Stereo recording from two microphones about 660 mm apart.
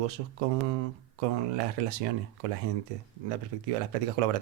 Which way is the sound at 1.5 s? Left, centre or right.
Right.